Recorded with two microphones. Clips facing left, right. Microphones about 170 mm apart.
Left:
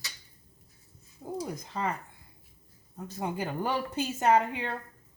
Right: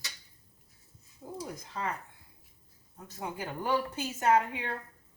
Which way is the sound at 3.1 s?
30° left (ahead or behind).